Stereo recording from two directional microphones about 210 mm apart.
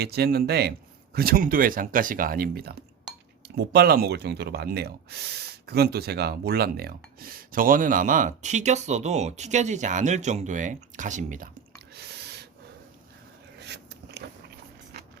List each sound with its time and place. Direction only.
0.0 s speech: 50° right (ahead or behind)
11.9 s snort: 50° right (ahead or behind)
13.6 s a sound: 55° right (ahead or behind)